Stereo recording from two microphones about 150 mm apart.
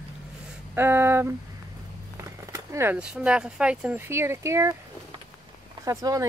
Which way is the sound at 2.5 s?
15° right (ahead or behind).